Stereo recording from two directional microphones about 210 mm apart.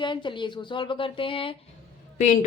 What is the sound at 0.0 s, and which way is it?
Speech, 20° left (ahead or behind).